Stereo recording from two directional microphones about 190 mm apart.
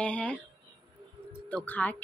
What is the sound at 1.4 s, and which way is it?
Speech, 10° left (ahead or behind).